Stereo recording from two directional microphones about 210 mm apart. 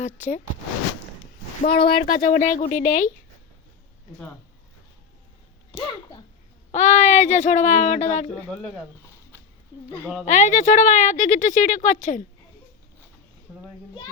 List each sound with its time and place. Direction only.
1.6 s speech: 50° left (ahead or behind)
5.7 s a sound: 20° left (ahead or behind)
6.7 s speech: 35° left (ahead or behind)
10.2 s speech: 35° left (ahead or behind)